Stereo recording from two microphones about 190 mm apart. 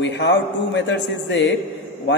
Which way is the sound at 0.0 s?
70° left (ahead or behind).